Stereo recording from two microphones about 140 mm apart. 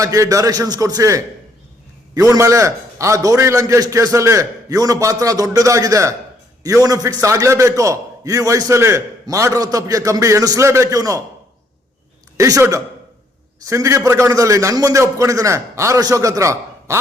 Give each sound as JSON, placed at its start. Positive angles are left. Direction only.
{"t": 0.0, "sound": "a man's voice", "side_deg": -25}
{"t": 12.4, "sound": "a man's voice", "side_deg": -25}